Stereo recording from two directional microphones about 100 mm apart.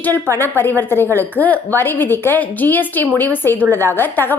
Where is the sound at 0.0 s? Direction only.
20° left (ahead or behind).